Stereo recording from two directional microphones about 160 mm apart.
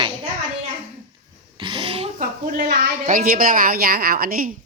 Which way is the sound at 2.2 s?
70° right (ahead or behind).